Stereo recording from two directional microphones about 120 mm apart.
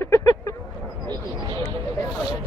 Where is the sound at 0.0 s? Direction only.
25° left (ahead or behind).